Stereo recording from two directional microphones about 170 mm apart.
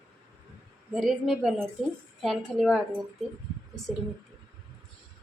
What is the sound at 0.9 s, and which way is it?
A woman's voice, centre (ahead or behind).